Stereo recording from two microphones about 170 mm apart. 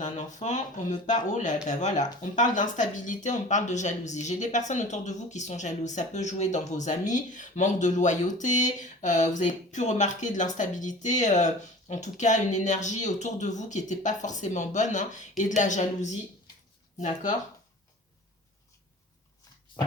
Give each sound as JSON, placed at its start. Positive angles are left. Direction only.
{"t": 0.0, "sound": "speech", "side_deg": 45}